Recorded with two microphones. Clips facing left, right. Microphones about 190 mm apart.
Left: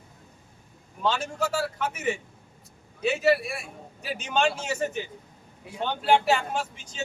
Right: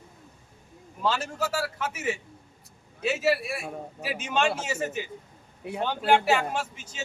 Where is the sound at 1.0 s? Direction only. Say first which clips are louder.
Left 1 dB; centre (ahead or behind).